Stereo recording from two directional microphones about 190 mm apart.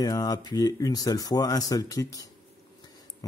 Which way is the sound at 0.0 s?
20° left (ahead or behind).